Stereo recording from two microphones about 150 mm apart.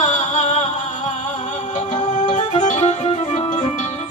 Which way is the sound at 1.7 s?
55° left (ahead or behind).